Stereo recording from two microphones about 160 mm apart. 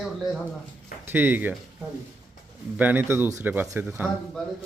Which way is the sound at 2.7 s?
10° right (ahead or behind).